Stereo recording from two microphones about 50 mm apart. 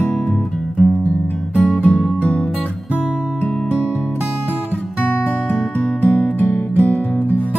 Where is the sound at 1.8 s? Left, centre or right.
Left.